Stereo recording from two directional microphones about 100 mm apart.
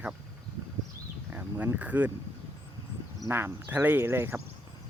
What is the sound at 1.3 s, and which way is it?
Speech, 20° right (ahead or behind).